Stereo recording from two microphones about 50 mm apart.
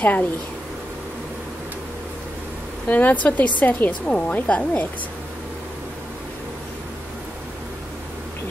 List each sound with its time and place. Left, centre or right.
0.0 s speech: left
2.9 s speech: left